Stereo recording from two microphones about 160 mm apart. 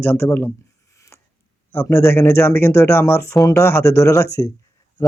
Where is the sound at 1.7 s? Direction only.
15° left (ahead or behind).